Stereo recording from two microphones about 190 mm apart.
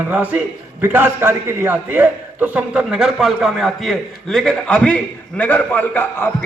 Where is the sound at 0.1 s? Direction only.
10° right (ahead or behind).